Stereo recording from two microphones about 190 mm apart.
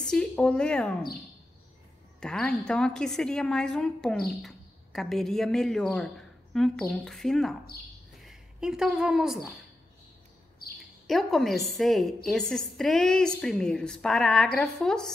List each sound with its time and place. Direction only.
0.0 s a woman's voice: 5° left (ahead or behind)
2.1 s a woman's voice: 5° left (ahead or behind)
10.6 s chirp: 55° left (ahead or behind)
11.1 s a woman's voice: centre (ahead or behind)